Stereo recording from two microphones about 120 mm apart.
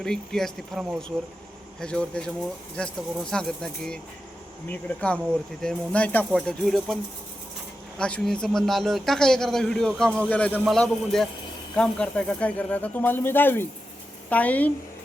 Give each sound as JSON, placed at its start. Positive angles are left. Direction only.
{"t": 0.0, "sound": "a man's voice", "side_deg": 5}